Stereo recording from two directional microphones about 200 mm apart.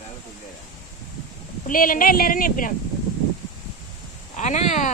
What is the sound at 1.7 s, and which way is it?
A woman's voice, 45° left (ahead or behind).